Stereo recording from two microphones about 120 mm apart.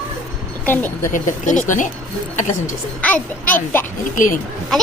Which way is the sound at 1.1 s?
90° left.